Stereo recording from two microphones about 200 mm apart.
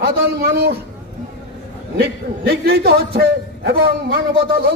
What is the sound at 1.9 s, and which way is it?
A man's voice, 55° right (ahead or behind).